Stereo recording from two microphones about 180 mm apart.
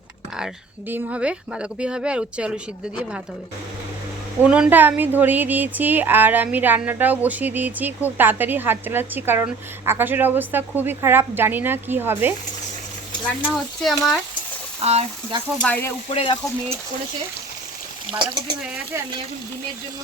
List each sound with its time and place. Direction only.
0.3 s speech: 5° right (ahead or behind)
4.4 s speech: 5° right (ahead or behind)
13.4 s speech: centre (ahead or behind)
14.8 s speech: 35° right (ahead or behind)
15.6 s speech: 10° left (ahead or behind)
16.0 s speech: 30° left (ahead or behind)